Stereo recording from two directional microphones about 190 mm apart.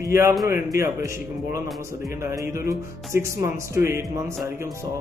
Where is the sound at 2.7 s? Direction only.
15° right (ahead or behind).